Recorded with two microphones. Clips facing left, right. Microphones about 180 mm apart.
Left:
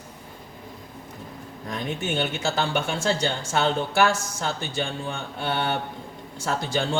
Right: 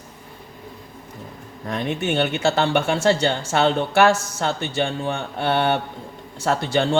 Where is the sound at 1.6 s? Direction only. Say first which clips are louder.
Right 5 dB; 65° right (ahead or behind).